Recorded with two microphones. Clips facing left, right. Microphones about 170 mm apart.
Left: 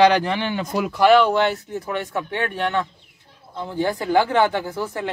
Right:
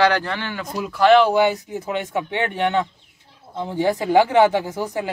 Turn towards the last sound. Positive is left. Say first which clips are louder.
# right 1 dB
turn(degrees=-15)  # may be behind; listen again after turning